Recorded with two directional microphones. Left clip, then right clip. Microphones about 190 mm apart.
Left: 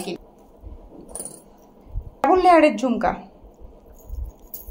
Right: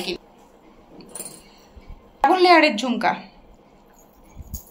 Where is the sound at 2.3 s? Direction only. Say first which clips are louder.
Left 1 dB; 35° left (ahead or behind).